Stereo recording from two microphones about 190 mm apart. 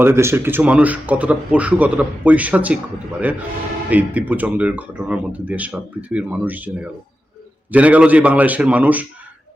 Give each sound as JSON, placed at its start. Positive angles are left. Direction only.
{"t": 0.0, "sound": "speech", "side_deg": -15}